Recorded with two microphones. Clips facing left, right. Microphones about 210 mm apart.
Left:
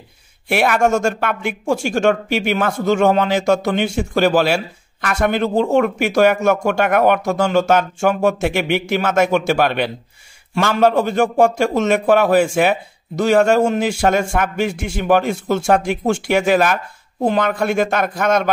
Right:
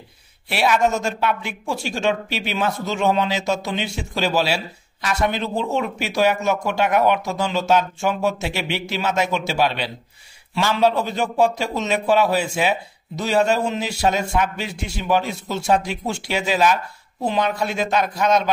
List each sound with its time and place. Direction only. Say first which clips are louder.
0.5 s speech: left 4 dB; 50° left (ahead or behind)